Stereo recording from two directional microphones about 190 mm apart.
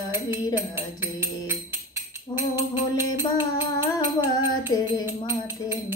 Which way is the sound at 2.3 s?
15° right (ahead or behind).